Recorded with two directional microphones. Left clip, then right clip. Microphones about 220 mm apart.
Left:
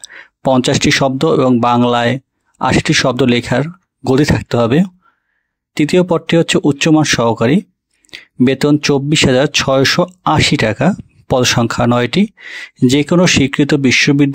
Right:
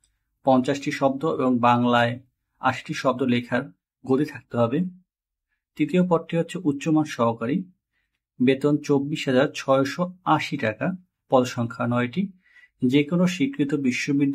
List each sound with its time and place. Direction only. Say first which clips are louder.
0.4 s speech: left 8 dB; 45° left (ahead or behind)